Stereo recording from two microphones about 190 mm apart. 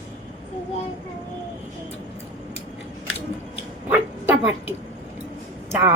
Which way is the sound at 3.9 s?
10° right (ahead or behind).